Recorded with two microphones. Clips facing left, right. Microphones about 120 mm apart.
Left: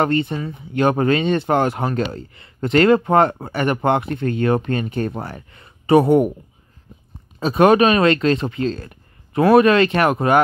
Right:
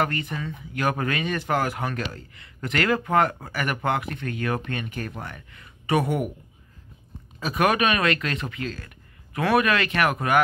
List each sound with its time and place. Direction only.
0.0 s speech: 30° left (ahead or behind)
7.3 s speech: 30° left (ahead or behind)